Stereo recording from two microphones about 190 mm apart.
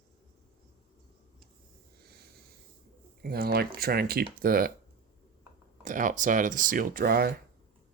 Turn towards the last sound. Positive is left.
turn(degrees=-50)  # may be behind; listen again after turning